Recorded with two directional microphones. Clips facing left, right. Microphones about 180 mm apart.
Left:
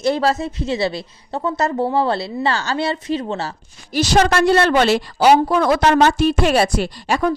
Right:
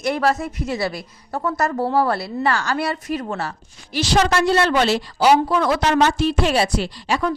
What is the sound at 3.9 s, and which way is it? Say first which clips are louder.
A woman's voice: left 3 dB; 50° left (ahead or behind).